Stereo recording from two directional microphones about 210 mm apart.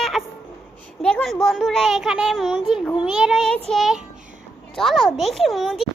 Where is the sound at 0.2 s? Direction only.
Centre (ahead or behind).